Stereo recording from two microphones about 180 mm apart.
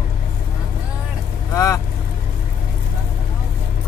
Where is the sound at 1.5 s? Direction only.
15° left (ahead or behind).